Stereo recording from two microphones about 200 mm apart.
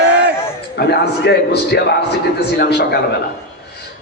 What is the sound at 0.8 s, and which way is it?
A man's voice, 55° left (ahead or behind).